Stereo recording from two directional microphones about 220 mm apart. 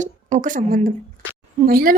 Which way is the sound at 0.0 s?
35° right (ahead or behind).